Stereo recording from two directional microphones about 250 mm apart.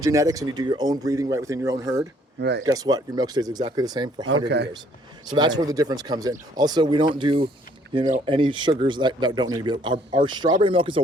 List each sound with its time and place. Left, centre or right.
0.0 s speech: centre
2.4 s speech: right
2.6 s speech: centre
4.4 s speech: right
5.3 s speech: centre